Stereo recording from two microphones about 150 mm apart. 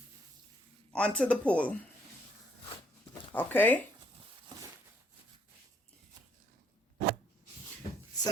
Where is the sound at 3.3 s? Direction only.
15° left (ahead or behind).